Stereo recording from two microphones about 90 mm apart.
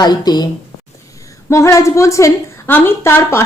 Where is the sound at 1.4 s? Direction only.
35° left (ahead or behind).